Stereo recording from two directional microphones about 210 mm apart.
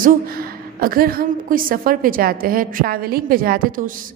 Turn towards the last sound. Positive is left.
turn(degrees=-40)  # may be behind; listen again after turning